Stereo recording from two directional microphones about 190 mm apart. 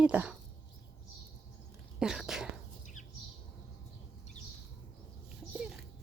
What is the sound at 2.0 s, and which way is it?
Speech, 5° right (ahead or behind).